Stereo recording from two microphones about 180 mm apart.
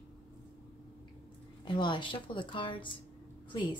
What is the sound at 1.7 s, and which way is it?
Speech, 25° left (ahead or behind).